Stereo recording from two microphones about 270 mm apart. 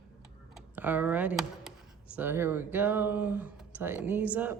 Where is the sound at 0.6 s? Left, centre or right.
Centre.